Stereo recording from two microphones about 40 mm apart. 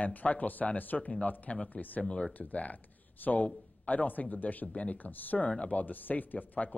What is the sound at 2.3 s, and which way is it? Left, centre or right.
A man's voice, left.